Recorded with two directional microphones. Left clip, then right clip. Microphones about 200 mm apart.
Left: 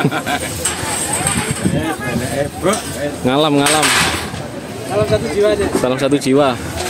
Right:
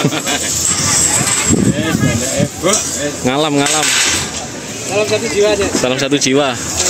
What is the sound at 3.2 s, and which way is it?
Speech, centre (ahead or behind).